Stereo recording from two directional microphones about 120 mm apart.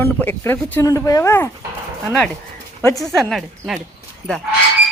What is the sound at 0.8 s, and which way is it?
Speech, 30° left (ahead or behind).